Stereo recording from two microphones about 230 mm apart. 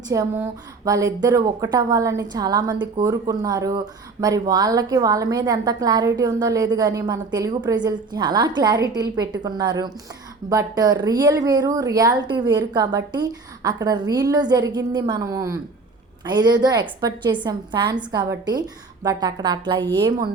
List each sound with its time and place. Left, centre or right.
0.1 s a woman's voice: centre